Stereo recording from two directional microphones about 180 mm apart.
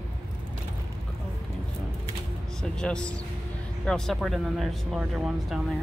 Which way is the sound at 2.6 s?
5° left (ahead or behind).